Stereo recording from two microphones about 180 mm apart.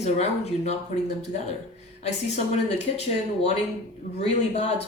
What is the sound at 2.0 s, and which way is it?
Speech, 35° left (ahead or behind).